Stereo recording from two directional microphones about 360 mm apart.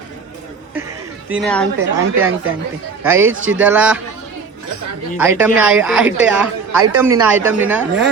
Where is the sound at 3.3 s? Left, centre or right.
Right.